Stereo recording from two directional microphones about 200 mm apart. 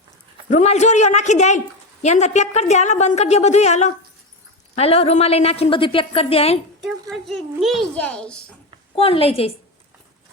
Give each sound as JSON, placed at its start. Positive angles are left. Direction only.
{"t": 0.5, "sound": "a woman's voice", "side_deg": 35}
{"t": 7.1, "sound": "a woman's voice", "side_deg": 0}
{"t": 9.0, "sound": "a woman's voice", "side_deg": 30}